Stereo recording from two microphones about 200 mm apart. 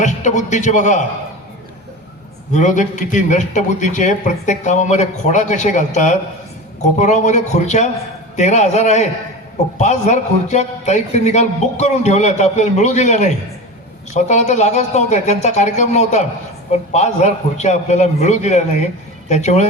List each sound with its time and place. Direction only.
0.0 s a man's voice: 35° left (ahead or behind)
2.5 s a man's voice: 35° left (ahead or behind)